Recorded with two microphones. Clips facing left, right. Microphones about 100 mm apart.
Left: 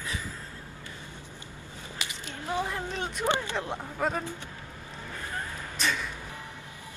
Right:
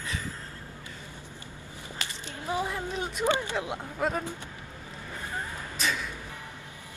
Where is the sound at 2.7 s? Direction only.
5° right (ahead or behind).